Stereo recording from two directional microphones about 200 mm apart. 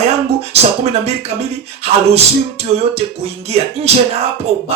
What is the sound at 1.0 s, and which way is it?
A man's voice, 30° right (ahead or behind).